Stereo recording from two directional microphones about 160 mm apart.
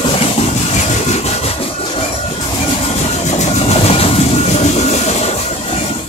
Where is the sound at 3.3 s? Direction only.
45° left (ahead or behind).